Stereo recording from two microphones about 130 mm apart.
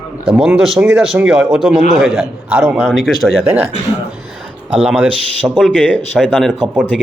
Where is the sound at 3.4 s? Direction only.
15° right (ahead or behind).